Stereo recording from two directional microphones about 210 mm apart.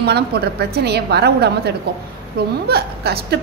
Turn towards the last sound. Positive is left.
turn(degrees=-50)  # may be behind; listen again after turning